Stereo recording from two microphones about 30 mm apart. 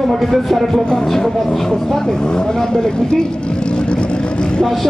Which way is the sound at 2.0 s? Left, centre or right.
Left.